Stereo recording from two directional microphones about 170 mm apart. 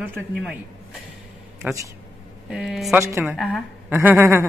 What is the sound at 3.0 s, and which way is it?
Speech, 15° right (ahead or behind).